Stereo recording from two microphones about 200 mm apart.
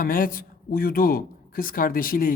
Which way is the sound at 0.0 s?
45° left (ahead or behind).